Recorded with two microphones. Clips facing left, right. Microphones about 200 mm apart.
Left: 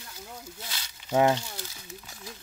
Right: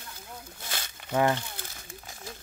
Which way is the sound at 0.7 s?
50° right (ahead or behind).